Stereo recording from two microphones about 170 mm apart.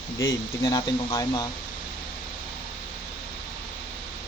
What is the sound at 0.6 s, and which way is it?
Speech, 25° left (ahead or behind).